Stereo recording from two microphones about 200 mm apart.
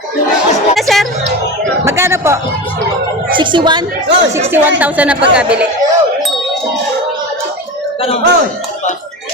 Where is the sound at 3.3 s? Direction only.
25° right (ahead or behind).